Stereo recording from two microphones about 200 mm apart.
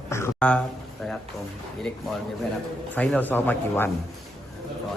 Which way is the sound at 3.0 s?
5° left (ahead or behind).